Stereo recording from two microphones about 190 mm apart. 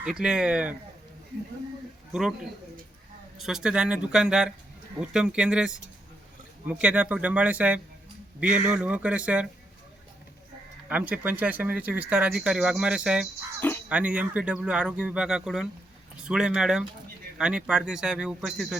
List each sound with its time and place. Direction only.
0.0 s a man's voice: 5° right (ahead or behind)
2.1 s a man's voice: centre (ahead or behind)
10.8 s a man's voice: 10° right (ahead or behind)